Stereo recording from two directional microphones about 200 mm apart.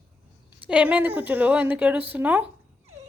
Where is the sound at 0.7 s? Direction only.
5° right (ahead or behind).